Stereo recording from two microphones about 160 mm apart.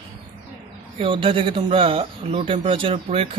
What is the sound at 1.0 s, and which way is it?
Speech, 35° right (ahead or behind).